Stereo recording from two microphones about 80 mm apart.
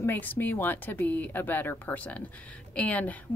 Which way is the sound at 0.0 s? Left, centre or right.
Left.